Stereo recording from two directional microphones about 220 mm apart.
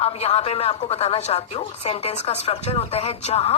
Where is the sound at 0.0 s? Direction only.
25° left (ahead or behind).